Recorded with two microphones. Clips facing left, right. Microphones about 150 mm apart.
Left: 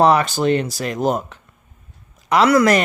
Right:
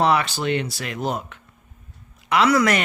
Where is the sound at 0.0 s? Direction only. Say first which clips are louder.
Left 5 dB; 40° left (ahead or behind).